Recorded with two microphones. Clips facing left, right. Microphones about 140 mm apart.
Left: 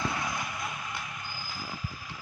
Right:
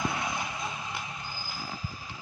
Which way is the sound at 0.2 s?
20° right (ahead or behind).